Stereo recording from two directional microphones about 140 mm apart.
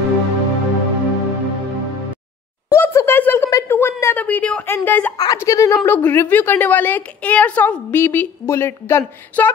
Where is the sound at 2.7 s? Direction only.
20° left (ahead or behind).